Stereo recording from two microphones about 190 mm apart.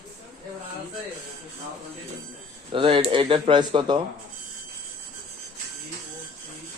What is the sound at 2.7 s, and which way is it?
Speech, 30° right (ahead or behind).